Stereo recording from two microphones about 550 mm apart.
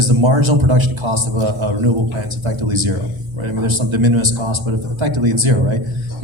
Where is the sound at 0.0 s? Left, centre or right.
Right.